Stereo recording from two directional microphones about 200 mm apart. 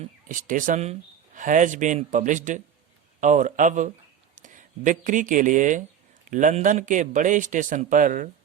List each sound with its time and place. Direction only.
0.0 s speech: 40° right (ahead or behind)